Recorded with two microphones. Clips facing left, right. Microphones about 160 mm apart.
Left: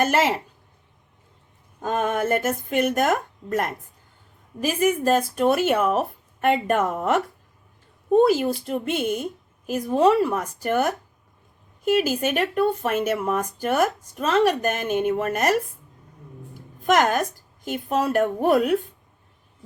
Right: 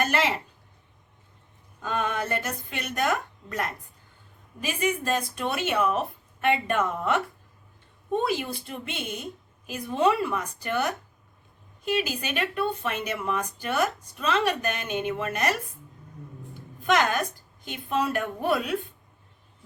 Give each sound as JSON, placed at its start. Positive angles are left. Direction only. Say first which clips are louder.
{"t": 0.0, "sound": "a woman's voice", "louder": "left 5 dB", "side_deg": 45}
{"t": 1.8, "sound": "speech", "louder": "left 5 dB", "side_deg": 45}
{"t": 16.8, "sound": "speech", "louder": "left 4 dB", "side_deg": 40}